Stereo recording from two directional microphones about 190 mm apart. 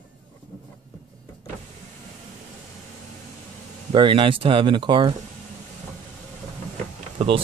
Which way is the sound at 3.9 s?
25° right (ahead or behind).